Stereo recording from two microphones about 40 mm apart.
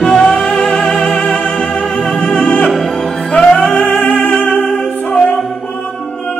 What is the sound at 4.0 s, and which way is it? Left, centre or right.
Music, left.